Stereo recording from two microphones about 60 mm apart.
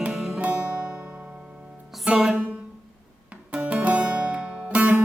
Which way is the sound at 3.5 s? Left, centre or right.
Right.